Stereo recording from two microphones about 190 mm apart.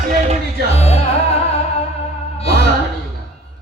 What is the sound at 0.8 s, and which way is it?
Music, 35° left (ahead or behind).